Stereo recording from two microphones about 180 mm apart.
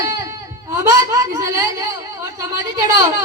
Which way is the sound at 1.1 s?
20° right (ahead or behind).